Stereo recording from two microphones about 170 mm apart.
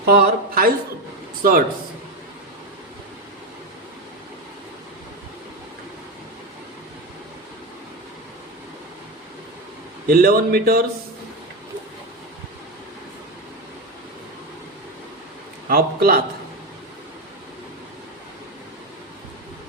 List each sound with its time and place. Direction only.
0.0 s speech: 60° right (ahead or behind)
10.1 s speech: 60° right (ahead or behind)
15.7 s speech: 65° right (ahead or behind)